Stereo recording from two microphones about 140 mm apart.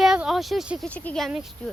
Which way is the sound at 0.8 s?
5° left (ahead or behind).